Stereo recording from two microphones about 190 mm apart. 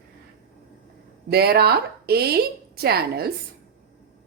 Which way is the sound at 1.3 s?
55° right (ahead or behind).